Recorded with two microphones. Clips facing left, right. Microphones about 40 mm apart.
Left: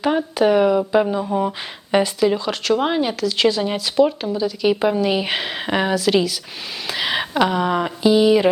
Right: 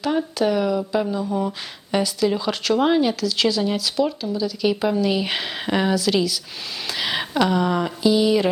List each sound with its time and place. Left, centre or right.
0.3 s speech: left
2.4 s a woman's voice: centre